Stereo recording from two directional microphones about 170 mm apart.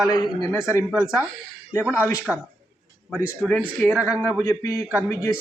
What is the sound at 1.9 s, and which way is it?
Speech, 15° left (ahead or behind).